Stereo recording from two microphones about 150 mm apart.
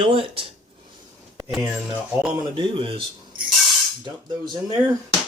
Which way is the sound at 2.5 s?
35° right (ahead or behind).